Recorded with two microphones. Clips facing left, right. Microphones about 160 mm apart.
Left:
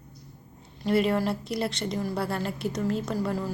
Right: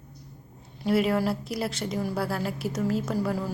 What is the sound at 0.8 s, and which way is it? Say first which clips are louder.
Speech: even; 5° right (ahead or behind).